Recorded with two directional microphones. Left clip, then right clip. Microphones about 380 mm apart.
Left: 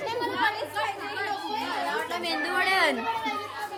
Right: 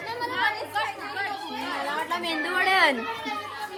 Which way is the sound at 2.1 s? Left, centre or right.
Centre.